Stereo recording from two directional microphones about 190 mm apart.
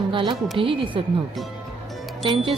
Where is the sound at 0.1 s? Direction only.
25° right (ahead or behind).